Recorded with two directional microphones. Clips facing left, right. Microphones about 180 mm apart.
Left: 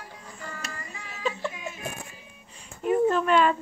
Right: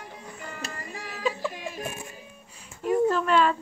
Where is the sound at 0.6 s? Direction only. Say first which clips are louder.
Right 3 dB; 35° right (ahead or behind).